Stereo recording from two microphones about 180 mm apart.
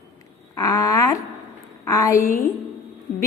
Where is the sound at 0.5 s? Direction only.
20° left (ahead or behind).